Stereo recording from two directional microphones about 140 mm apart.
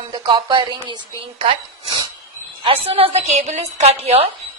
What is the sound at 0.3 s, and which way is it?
A woman's voice, 35° right (ahead or behind).